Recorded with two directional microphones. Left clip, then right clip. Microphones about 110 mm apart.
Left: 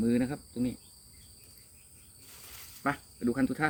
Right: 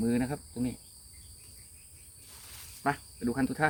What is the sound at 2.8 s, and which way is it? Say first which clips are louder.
Speech: right 1 dB; 10° right (ahead or behind).